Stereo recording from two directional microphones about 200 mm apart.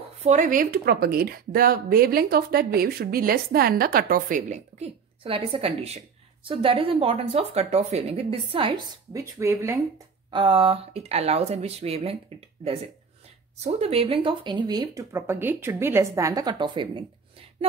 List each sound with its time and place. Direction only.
0.2 s speech: 40° right (ahead or behind)
9.1 s speech: 15° right (ahead or behind); by 12.7 s 30° right (ahead or behind)
13.7 s speech: 30° right (ahead or behind)